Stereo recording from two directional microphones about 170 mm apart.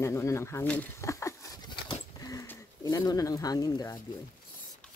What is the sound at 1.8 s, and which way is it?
Dog, 20° left (ahead or behind).